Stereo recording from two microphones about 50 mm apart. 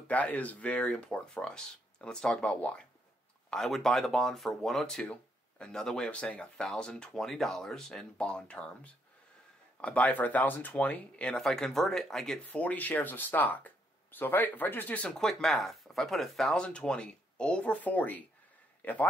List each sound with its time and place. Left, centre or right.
0.1 s speech: left
3.5 s speech: centre
6.0 s speech: left
6.5 s speech: centre
8.2 s speech: centre
11.4 s speech: centre
12.4 s speech: left
15.0 s speech: centre
16.5 s speech: left